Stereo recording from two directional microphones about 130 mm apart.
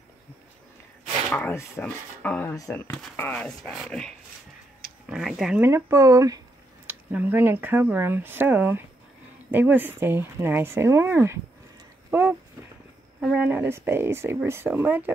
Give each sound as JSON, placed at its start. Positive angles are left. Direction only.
{"t": 1.3, "sound": "speech", "side_deg": 15}
{"t": 5.1, "sound": "speech", "side_deg": -5}
{"t": 5.6, "sound": "speech", "side_deg": -20}
{"t": 6.9, "sound": "speech", "side_deg": -10}
{"t": 12.1, "sound": "dog", "side_deg": -15}
{"t": 13.2, "sound": "speech", "side_deg": -15}